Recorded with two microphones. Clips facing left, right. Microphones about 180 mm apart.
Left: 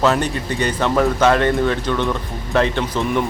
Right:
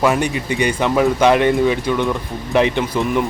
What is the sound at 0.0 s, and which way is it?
Speech, 10° right (ahead or behind).